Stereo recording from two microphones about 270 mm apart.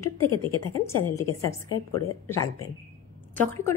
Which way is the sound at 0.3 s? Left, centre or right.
Left.